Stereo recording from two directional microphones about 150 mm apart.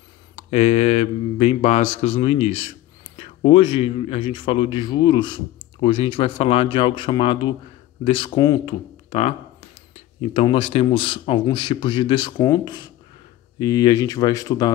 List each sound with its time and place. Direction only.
0.4 s speech: 45° left (ahead or behind)
10.3 s speech: 35° left (ahead or behind)